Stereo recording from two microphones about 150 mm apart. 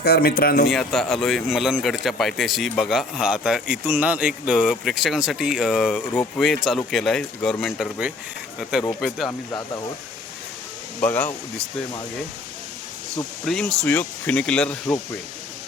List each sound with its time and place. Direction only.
0.0 s speech: 90° left
0.7 s a man's voice: centre (ahead or behind)
9.5 s speech: 25° left (ahead or behind)
13.4 s speech: 5° left (ahead or behind)